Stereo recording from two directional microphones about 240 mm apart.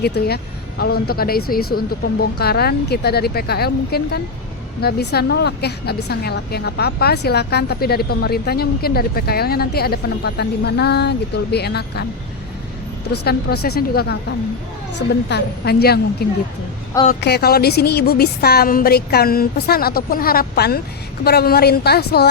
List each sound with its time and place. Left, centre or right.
0.0 s a woman's voice: left
13.6 s a woman's voice: left